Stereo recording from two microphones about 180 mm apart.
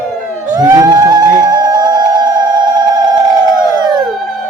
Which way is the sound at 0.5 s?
20° right (ahead or behind).